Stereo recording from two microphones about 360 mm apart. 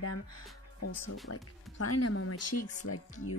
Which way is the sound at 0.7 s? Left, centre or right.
Left.